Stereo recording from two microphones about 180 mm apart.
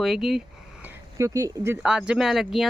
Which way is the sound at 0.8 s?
15° right (ahead or behind).